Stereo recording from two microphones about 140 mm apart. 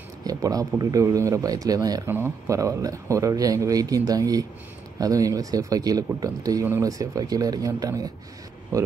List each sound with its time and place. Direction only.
0.2 s speech: 25° right (ahead or behind)
2.0 s speech: 15° right (ahead or behind)